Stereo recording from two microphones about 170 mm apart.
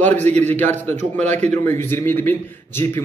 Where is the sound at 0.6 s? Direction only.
10° left (ahead or behind).